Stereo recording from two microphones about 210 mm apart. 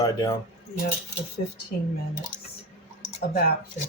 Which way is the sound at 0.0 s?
20° left (ahead or behind).